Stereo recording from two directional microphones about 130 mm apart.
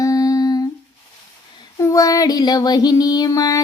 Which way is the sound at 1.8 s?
25° left (ahead or behind).